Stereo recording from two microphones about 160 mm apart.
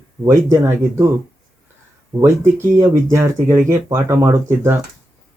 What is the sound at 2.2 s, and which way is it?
Speech, 20° right (ahead or behind).